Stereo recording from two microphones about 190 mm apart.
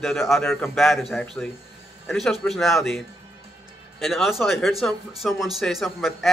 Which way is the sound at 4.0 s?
Centre (ahead or behind).